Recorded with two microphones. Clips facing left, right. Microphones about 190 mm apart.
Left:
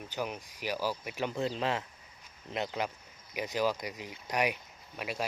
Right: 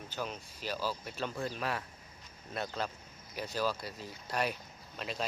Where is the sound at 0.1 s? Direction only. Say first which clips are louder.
Left 3 dB; 15° left (ahead or behind).